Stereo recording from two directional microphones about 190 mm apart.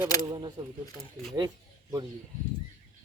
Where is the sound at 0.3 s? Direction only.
20° right (ahead or behind).